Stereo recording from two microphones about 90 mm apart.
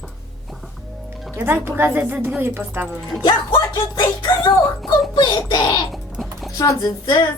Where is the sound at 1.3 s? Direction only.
25° right (ahead or behind).